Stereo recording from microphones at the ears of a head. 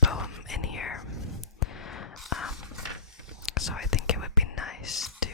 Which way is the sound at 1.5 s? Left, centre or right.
Left.